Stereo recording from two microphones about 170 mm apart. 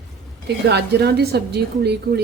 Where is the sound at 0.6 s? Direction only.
75° right (ahead or behind).